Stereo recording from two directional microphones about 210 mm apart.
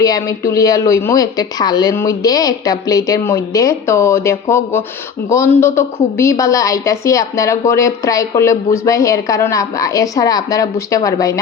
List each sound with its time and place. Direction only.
0.0 s a woman's voice: 15° left (ahead or behind)